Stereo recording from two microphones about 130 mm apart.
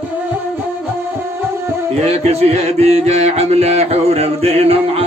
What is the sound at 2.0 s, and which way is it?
Music, 50° right (ahead or behind).